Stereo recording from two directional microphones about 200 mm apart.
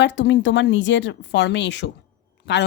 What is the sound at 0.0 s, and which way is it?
Speech, 60° left (ahead or behind).